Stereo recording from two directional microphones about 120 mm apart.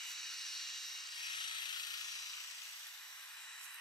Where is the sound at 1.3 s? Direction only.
40° left (ahead or behind).